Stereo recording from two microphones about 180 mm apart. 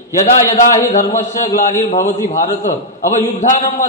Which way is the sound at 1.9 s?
40° left (ahead or behind).